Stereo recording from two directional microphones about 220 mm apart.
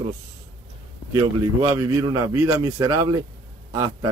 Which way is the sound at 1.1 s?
15° right (ahead or behind).